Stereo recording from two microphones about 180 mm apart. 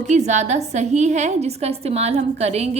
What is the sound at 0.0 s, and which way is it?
A woman's voice, 40° right (ahead or behind).